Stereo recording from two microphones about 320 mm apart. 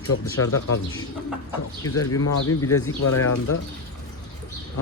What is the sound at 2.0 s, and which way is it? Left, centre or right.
Speech, left.